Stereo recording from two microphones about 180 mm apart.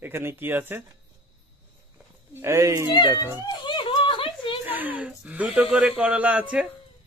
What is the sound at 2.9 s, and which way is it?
Speech, 20° left (ahead or behind).